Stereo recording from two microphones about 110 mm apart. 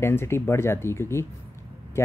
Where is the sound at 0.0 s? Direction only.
20° left (ahead or behind).